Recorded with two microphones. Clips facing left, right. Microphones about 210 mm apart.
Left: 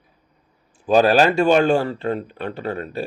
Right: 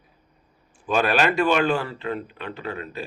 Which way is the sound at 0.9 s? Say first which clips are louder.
Left 6 dB; 35° left (ahead or behind).